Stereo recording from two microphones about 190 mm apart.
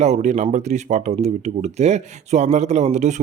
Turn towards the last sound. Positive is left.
turn(degrees=-40)  # may be behind; listen again after turning